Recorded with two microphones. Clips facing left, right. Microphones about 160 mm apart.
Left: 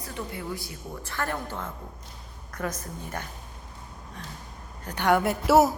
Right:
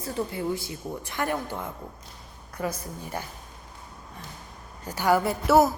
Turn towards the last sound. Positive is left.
turn(degrees=5)  # may be behind; listen again after turning